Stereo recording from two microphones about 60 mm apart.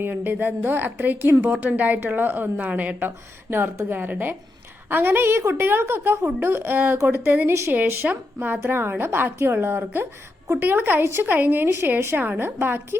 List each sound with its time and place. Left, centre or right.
0.0 s a woman's voice: right
1.5 s a woman's voice: right
3.5 s a woman's voice: right
6.7 s a woman's voice: right
7.4 s speech: right
7.7 s a woman's voice: right
11.3 s a woman's voice: right